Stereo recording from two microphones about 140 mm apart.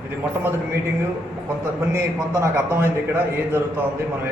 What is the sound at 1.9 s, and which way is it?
Speech, 20° right (ahead or behind).